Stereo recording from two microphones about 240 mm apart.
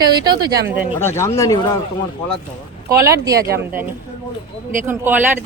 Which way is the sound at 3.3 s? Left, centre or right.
Right.